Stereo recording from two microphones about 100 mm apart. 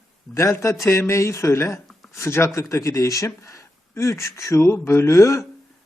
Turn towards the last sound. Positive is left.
turn(degrees=30)  # may be behind; listen again after turning